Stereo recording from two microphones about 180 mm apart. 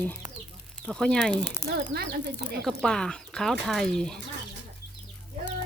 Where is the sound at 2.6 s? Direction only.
Centre (ahead or behind).